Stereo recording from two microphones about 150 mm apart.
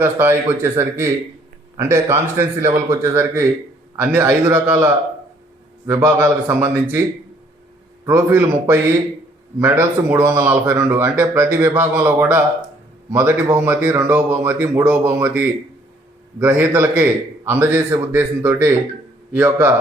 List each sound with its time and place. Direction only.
0.0 s speech: 15° right (ahead or behind)
8.0 s speech: 20° right (ahead or behind)